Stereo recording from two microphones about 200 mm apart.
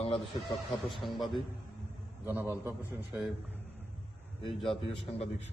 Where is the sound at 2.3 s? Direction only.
10° right (ahead or behind).